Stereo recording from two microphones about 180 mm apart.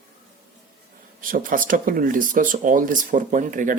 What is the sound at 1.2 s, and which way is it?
Speech, 50° right (ahead or behind).